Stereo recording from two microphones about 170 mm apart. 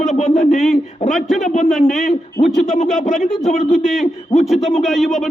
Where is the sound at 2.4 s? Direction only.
45° left (ahead or behind).